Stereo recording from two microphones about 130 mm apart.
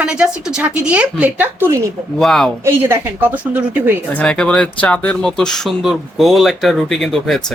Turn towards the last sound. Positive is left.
turn(degrees=5)  # may be behind; listen again after turning